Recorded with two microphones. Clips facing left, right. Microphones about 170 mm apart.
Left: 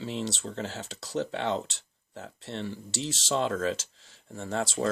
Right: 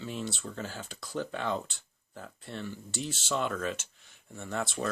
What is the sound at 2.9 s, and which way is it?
Speech, 90° left.